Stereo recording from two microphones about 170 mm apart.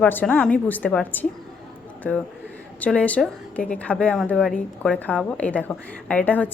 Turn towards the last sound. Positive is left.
turn(degrees=10)  # may be behind; listen again after turning